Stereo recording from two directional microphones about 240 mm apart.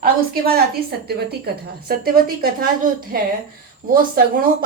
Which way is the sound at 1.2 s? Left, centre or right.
Right.